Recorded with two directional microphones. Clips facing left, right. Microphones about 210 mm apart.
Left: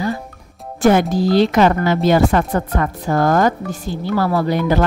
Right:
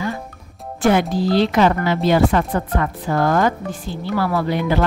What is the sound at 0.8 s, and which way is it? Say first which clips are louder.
Speech: left 3 dB; 45° left (ahead or behind).